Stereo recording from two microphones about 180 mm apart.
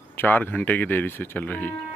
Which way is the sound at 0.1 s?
10° left (ahead or behind).